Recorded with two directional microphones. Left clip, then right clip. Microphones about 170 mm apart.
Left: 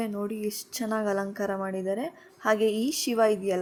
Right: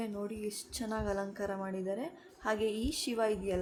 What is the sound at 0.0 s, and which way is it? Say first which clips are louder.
Speech: left 7 dB; 20° left (ahead or behind).